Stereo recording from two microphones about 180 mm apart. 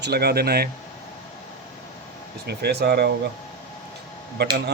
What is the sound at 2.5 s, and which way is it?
Speech, 65° right (ahead or behind).